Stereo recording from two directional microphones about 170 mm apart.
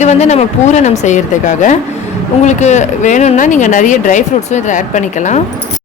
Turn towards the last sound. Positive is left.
turn(degrees=45)  # may be behind; listen again after turning